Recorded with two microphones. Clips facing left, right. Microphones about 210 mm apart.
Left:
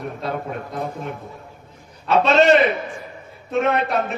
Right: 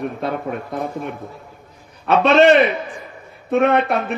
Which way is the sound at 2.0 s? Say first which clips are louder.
Right 3 dB; 55° right (ahead or behind).